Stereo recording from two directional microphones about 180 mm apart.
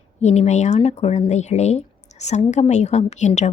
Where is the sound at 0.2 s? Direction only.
40° left (ahead or behind).